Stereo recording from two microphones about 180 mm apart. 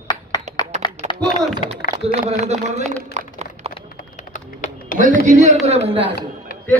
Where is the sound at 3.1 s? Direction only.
35° right (ahead or behind).